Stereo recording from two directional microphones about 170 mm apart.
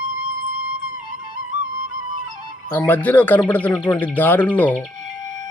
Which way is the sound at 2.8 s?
10° left (ahead or behind).